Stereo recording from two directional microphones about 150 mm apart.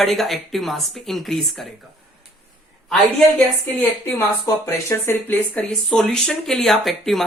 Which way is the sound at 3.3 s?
10° left (ahead or behind).